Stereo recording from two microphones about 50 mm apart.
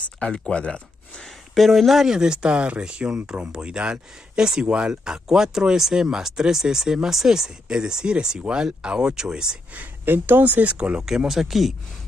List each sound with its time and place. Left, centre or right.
0.4 s speech: left
1.5 s speech: centre
9.8 s speech: right; by 11.2 s centre
11.2 s speech: centre